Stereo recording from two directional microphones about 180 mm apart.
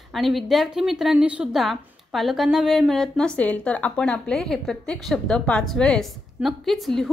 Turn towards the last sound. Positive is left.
turn(degrees=0)  # may be behind; listen again after turning